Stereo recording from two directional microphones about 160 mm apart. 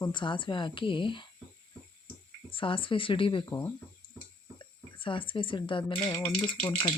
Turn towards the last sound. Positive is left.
turn(degrees=25)  # may be behind; listen again after turning